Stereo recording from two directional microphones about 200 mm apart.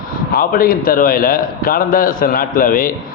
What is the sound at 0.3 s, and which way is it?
A man's voice, 45° left (ahead or behind).